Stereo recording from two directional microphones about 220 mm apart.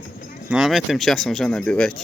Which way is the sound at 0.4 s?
5° right (ahead or behind).